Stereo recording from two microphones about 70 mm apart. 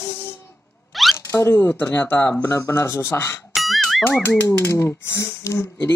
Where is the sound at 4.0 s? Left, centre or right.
Left.